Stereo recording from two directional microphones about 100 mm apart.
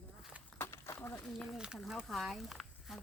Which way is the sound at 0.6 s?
25° left (ahead or behind).